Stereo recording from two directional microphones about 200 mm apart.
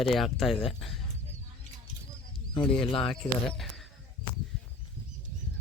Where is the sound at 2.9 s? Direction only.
25° left (ahead or behind).